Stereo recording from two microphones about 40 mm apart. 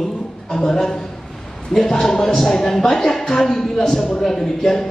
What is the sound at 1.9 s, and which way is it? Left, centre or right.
A woman's voice, centre.